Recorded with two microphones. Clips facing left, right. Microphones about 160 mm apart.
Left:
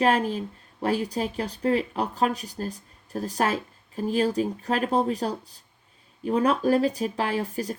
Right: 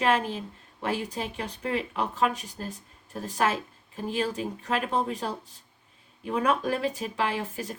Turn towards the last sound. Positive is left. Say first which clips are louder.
# left 4 dB
turn(degrees=40)  # may be behind; listen again after turning